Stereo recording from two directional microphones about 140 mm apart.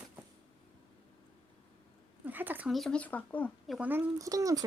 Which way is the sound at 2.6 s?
Centre (ahead or behind).